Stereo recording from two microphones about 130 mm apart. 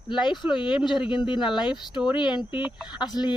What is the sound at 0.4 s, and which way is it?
Speech, 40° left (ahead or behind).